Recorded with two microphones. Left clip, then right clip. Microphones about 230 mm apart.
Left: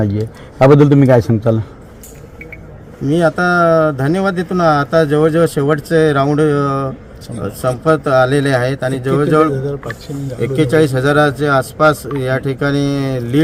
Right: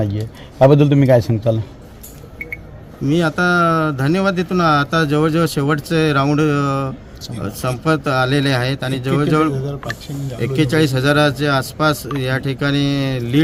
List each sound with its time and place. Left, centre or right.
0.9 s a man's voice: left
3.0 s speech: centre